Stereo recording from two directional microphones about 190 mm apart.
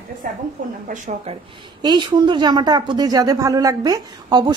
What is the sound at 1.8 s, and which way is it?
A woman's voice, 20° right (ahead or behind).